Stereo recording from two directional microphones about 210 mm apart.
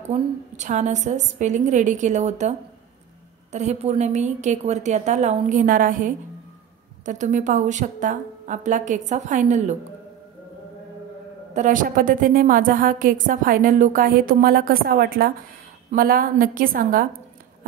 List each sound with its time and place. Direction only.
0.1 s a woman's voice: 35° right (ahead or behind)
3.5 s a woman's voice: 30° right (ahead or behind)
11.5 s a woman's voice: 40° right (ahead or behind)